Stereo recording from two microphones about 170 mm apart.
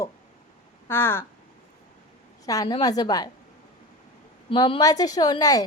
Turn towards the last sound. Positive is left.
turn(degrees=20)  # may be behind; listen again after turning